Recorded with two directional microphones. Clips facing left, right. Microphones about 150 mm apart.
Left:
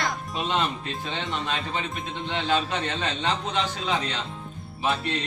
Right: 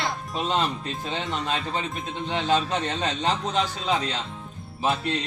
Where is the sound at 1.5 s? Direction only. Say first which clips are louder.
Right 1 dB; 40° right (ahead or behind).